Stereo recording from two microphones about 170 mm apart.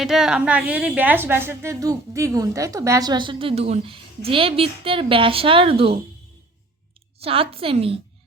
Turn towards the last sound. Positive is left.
turn(degrees=-35)  # may be behind; listen again after turning